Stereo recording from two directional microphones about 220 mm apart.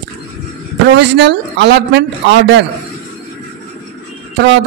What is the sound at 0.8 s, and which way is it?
Speech, 55° right (ahead or behind).